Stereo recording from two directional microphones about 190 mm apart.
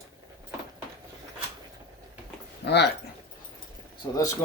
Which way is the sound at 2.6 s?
60° left (ahead or behind).